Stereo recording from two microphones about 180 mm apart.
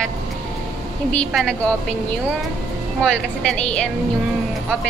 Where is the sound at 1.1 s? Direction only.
5° left (ahead or behind).